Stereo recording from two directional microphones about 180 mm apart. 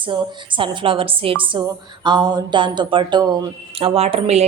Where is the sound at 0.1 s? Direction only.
30° right (ahead or behind).